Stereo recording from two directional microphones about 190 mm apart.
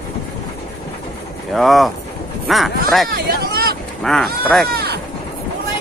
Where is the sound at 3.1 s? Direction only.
50° right (ahead or behind).